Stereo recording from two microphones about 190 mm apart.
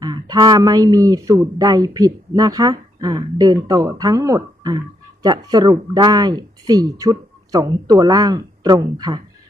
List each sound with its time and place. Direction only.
0.0 s speech: 20° right (ahead or behind)